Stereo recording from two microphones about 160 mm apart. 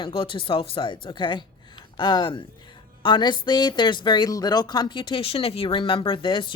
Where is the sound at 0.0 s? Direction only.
35° left (ahead or behind).